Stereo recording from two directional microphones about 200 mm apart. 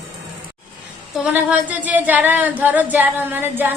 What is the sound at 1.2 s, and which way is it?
A woman's voice, 5° right (ahead or behind).